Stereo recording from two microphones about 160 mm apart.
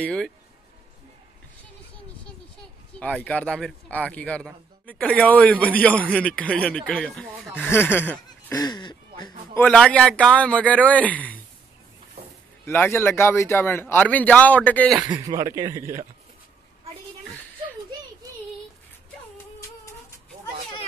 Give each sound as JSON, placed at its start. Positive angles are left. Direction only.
{"t": 0.0, "sound": "speech", "side_deg": 5}
{"t": 3.0, "sound": "a man's voice", "side_deg": 10}
{"t": 7.7, "sound": "a man's voice", "side_deg": 15}
{"t": 8.5, "sound": "speech", "side_deg": 25}
{"t": 9.6, "sound": "a man's voice", "side_deg": 5}
{"t": 12.6, "sound": "a man's voice", "side_deg": 10}
{"t": 15.4, "sound": "a man's voice", "side_deg": -20}